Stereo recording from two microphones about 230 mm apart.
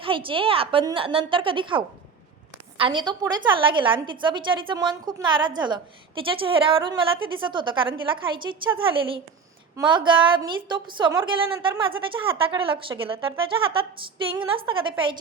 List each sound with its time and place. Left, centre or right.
0.0 s a woman's voice: right